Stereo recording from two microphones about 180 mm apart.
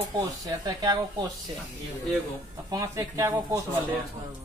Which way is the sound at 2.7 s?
20° right (ahead or behind).